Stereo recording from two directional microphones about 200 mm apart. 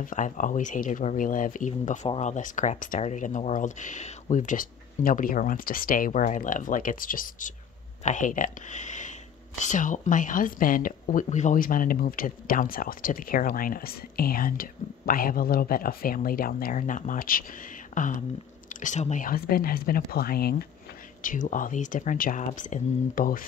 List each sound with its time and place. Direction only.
0.0 s speech: 40° left (ahead or behind)